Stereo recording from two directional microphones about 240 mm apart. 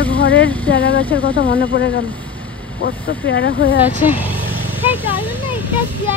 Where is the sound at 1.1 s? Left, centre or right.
Left.